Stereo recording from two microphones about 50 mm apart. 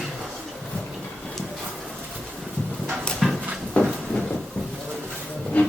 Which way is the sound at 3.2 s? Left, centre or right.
Centre.